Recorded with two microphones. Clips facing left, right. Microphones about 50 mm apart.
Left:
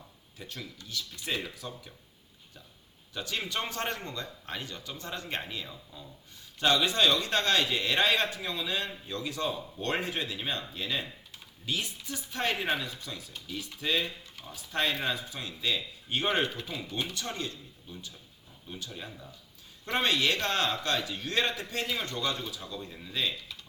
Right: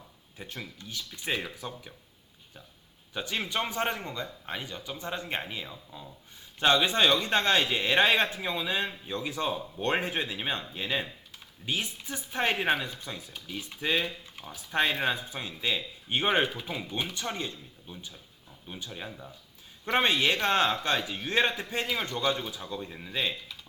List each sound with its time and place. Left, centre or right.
0.3 s speech: right
3.2 s speech: right
19.0 s speech: centre